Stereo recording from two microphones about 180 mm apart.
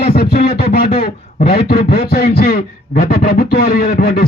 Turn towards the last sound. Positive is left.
turn(degrees=60)  # may be behind; listen again after turning